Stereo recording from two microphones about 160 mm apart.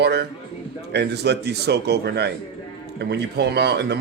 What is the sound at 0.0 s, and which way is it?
Speech, 90° right.